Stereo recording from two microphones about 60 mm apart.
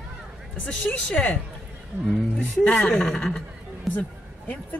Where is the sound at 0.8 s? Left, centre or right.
Left.